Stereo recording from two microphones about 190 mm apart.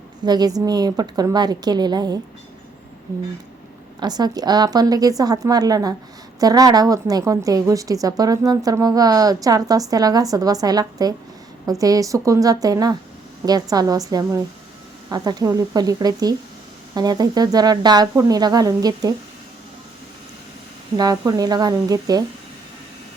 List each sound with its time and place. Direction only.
0.3 s a woman's voice: 20° right (ahead or behind)
4.0 s a woman's voice: 20° right (ahead or behind)
20.9 s a woman's voice: 20° right (ahead or behind)